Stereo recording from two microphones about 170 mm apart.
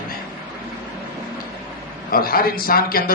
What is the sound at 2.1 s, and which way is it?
A man's voice, 60° left (ahead or behind).